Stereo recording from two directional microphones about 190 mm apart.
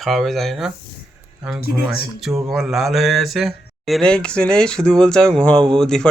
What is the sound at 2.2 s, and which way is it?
Speech, 5° right (ahead or behind).